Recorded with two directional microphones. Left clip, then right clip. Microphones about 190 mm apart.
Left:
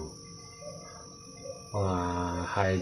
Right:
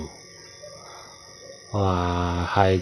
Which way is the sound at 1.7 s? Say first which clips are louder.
Right 7 dB; 45° right (ahead or behind).